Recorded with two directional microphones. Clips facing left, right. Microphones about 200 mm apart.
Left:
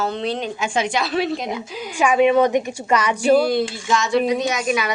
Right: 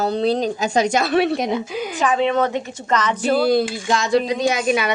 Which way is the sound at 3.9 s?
35° right (ahead or behind).